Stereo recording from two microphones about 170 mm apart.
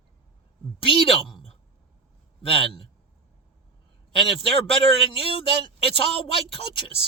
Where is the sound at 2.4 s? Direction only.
35° left (ahead or behind).